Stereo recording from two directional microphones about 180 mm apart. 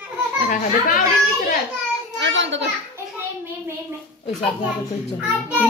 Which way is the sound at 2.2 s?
80° right.